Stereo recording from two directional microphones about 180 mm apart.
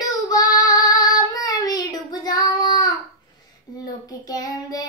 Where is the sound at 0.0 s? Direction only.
20° left (ahead or behind).